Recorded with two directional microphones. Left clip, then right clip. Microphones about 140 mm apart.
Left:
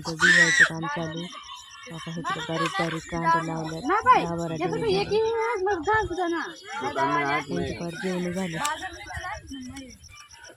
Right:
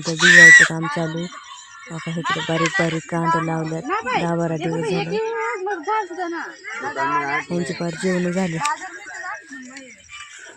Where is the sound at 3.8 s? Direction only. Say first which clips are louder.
Left 4 dB; centre (ahead or behind).